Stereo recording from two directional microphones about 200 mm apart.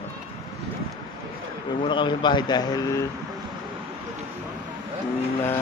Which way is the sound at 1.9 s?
25° left (ahead or behind).